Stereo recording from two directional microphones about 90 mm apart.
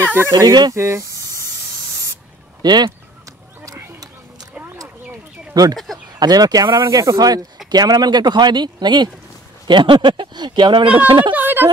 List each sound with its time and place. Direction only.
0.3 s speech: 50° right (ahead or behind)
0.7 s snake: 35° right (ahead or behind)
2.6 s speech: 50° right (ahead or behind)
5.5 s speech: 45° right (ahead or behind); by 11.3 s 65° right (ahead or behind)
11.3 s speech: 20° right (ahead or behind)